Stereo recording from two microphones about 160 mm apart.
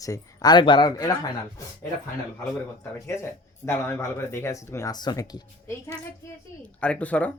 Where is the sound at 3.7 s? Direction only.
15° left (ahead or behind).